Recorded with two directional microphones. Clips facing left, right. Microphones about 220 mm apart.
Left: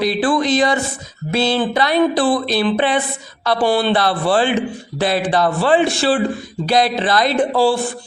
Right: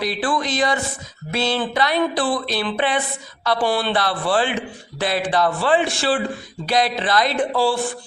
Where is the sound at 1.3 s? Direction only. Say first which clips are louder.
Left 5 dB; 30° left (ahead or behind).